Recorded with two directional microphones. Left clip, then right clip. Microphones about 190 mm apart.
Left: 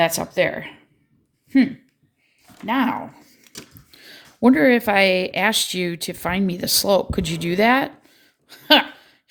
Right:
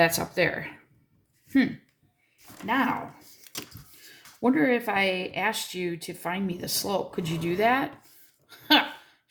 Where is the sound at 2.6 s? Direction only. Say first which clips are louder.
Left 4 dB; 55° left (ahead or behind).